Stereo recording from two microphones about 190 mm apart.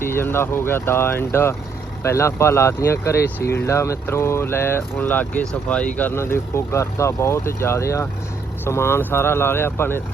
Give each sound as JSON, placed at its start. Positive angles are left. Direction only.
{"t": 0.0, "sound": "speech", "side_deg": 10}
{"t": 3.4, "sound": "speech", "side_deg": 60}
{"t": 3.7, "sound": "speech", "side_deg": 15}